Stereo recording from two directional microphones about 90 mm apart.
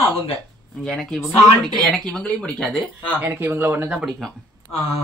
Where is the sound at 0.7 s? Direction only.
5° left (ahead or behind).